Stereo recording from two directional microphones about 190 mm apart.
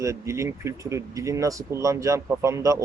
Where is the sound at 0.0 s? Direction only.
15° right (ahead or behind).